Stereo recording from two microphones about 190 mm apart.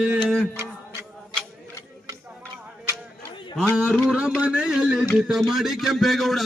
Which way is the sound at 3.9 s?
Centre (ahead or behind).